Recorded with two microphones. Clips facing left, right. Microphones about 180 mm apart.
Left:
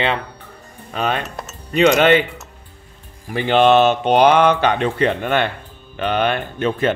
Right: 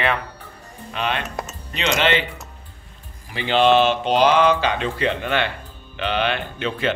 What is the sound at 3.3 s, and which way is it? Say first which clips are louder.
A man's voice: left 3 dB; 50° left (ahead or behind).